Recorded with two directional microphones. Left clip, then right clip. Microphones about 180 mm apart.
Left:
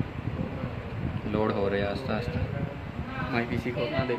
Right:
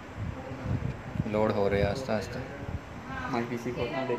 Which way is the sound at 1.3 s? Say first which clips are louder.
Right 1 dB; 15° right (ahead or behind).